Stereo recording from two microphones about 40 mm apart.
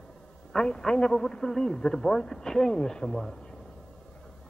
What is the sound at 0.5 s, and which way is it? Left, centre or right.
Speech, centre.